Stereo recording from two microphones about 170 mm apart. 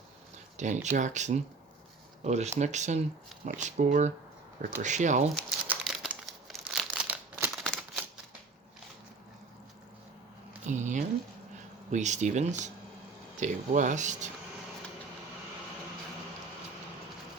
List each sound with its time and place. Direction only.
0.5 s speech: 45° right (ahead or behind)
5.6 s crumpling: centre (ahead or behind)
7.5 s shuffling cards: centre (ahead or behind)
10.7 s speech: 45° right (ahead or behind)